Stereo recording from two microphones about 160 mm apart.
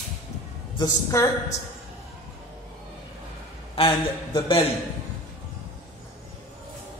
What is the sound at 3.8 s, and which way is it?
Speech, 35° left (ahead or behind).